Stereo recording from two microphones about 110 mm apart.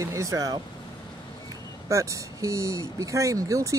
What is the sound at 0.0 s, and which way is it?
Speech, 30° right (ahead or behind).